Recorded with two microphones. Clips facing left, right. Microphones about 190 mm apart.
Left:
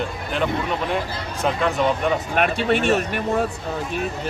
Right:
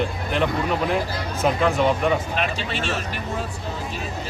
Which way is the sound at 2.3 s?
55° left (ahead or behind).